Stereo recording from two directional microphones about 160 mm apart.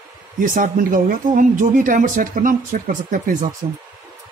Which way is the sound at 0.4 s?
60° right (ahead or behind).